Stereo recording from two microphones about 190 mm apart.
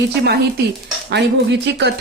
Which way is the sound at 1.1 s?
65° right (ahead or behind).